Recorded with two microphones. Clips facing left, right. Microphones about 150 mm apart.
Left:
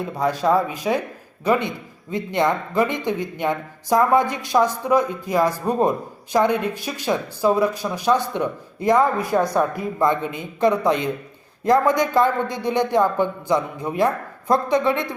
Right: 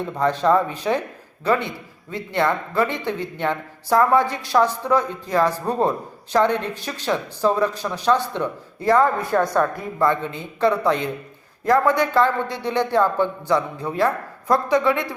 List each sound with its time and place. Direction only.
0.0 s speech: 10° left (ahead or behind)